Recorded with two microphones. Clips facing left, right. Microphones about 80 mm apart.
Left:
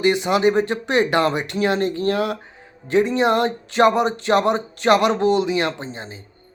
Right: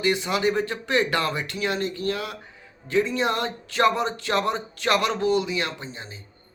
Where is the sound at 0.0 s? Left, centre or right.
Left.